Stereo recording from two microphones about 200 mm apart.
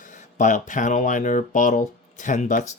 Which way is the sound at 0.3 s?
40° left (ahead or behind).